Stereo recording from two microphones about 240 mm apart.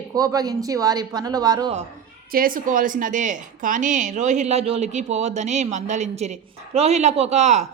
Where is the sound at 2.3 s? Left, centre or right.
Right.